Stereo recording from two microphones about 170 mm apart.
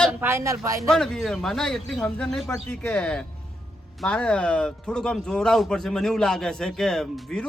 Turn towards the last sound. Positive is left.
turn(degrees=5)  # may be behind; listen again after turning